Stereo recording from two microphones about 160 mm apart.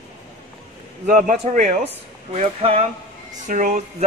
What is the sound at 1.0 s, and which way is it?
Speech, 55° right (ahead or behind).